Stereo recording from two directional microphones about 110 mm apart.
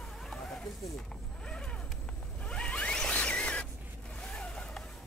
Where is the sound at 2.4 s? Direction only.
10° left (ahead or behind).